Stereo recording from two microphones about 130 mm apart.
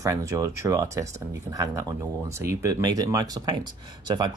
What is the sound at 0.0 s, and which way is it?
Speech, 25° right (ahead or behind).